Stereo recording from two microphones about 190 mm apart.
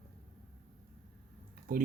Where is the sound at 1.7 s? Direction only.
50° right (ahead or behind).